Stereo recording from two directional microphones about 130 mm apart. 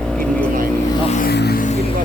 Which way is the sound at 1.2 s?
75° left (ahead or behind).